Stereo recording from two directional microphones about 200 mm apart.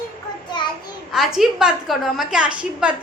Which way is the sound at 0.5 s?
20° left (ahead or behind).